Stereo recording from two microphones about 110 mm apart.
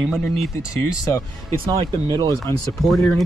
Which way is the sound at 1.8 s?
40° right (ahead or behind).